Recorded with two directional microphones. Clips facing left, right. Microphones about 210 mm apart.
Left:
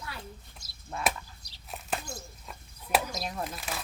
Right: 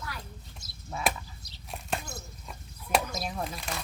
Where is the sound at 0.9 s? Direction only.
Centre (ahead or behind).